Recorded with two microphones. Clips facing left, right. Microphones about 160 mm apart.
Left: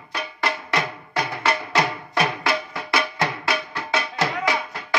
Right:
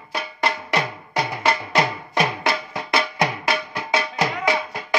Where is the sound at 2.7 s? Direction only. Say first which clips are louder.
Right 1 dB; 20° right (ahead or behind).